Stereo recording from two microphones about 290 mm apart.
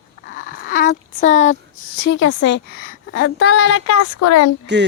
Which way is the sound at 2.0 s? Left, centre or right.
Left.